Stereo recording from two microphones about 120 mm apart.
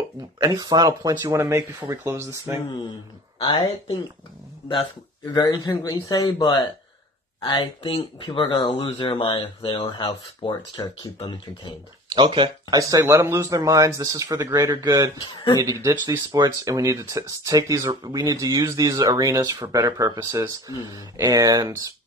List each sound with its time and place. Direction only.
0.4 s speech: 35° right (ahead or behind)
4.6 s speech: 40° left (ahead or behind)
12.1 s speech: 40° right (ahead or behind)
12.6 s speech: 30° right (ahead or behind)
15.1 s speech: 35° left (ahead or behind)
15.6 s speech: 30° right (ahead or behind)